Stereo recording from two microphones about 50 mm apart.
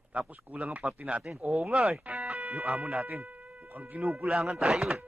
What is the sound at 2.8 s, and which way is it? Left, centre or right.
Speech, right.